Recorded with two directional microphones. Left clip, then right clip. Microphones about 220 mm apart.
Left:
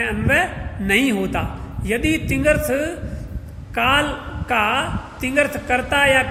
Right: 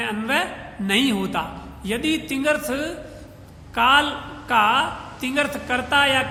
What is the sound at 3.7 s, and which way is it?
A man's voice, 15° right (ahead or behind).